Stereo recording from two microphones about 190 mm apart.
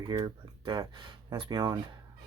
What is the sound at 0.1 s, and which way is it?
Speech, 25° right (ahead or behind).